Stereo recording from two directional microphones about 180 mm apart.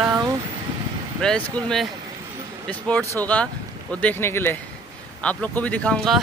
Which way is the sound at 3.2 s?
10° left (ahead or behind).